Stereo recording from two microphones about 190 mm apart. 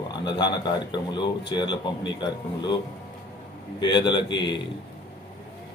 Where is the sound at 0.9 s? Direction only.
25° left (ahead or behind).